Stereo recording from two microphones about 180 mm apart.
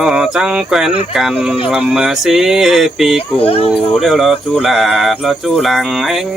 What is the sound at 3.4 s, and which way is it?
Speech, 35° left (ahead or behind).